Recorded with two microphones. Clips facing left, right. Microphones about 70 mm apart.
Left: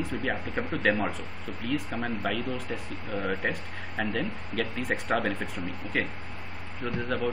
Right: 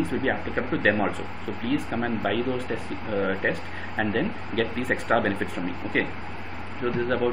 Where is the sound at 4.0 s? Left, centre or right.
Centre.